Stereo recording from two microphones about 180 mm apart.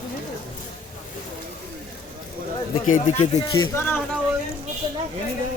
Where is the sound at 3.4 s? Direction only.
15° left (ahead or behind).